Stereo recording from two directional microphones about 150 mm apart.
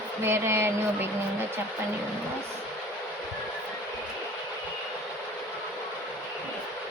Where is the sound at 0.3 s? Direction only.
15° right (ahead or behind).